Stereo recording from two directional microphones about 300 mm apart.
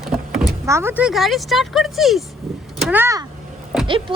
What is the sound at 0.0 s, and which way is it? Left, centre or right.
Speech, centre.